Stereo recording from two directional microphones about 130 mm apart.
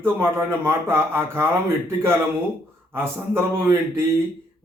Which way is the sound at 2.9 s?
20° right (ahead or behind).